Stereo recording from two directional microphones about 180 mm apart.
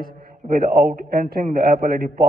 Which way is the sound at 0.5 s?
55° right (ahead or behind).